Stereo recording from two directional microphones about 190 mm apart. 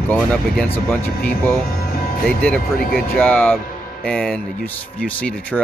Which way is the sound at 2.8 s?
50° left (ahead or behind).